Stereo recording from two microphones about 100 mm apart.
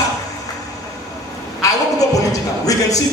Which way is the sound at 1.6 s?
35° left (ahead or behind).